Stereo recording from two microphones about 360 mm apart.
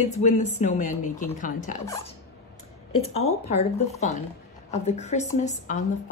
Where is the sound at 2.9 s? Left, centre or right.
Centre.